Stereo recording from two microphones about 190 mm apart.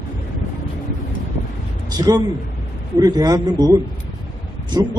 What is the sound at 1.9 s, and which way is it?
Speech, 20° right (ahead or behind).